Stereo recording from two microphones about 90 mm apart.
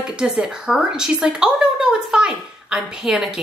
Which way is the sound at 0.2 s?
10° right (ahead or behind).